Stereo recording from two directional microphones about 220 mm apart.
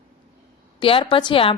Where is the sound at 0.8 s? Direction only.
25° left (ahead or behind).